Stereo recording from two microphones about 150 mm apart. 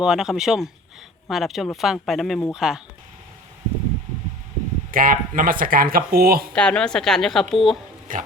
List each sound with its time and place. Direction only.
0.0 s speech: 5° right (ahead or behind)
4.9 s speech: 70° right (ahead or behind); by 6.5 s 90° right
6.5 s speech: 5° left (ahead or behind)
8.1 s speech: 65° right (ahead or behind)